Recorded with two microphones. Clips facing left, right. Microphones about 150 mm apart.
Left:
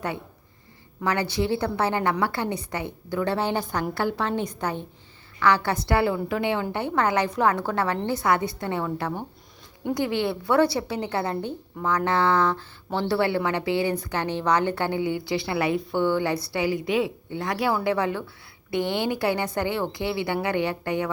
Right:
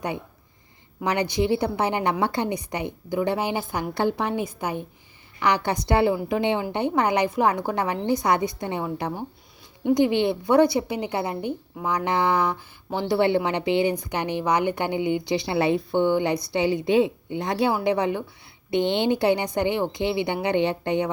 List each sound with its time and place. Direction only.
1.0 s a woman's voice: 15° right (ahead or behind)